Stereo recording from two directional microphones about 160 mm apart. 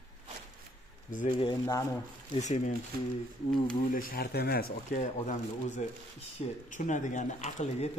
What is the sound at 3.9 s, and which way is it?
Speech, 65° left (ahead or behind).